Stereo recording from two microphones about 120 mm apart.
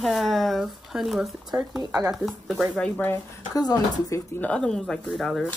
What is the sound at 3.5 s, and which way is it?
Speech, 30° left (ahead or behind).